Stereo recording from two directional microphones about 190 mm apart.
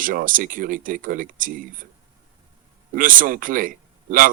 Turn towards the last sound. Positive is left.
turn(degrees=-45)  # may be behind; listen again after turning